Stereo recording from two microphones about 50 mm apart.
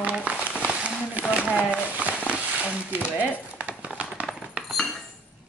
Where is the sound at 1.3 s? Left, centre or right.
Right.